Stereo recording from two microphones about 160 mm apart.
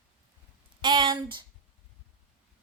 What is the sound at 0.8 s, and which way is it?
Speech, 30° right (ahead or behind).